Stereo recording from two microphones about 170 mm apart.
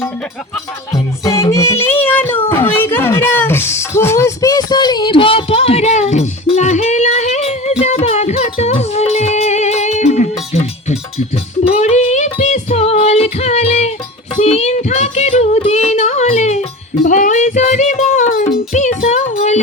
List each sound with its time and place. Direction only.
1.2 s music: 20° left (ahead or behind)
1.8 s child singing: 10° left (ahead or behind)
2.5 s music: 10° left (ahead or behind); by 19.5 s 45° left (ahead or behind)